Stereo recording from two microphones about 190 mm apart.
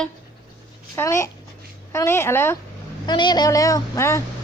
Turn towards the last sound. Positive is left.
turn(degrees=15)  # may be behind; listen again after turning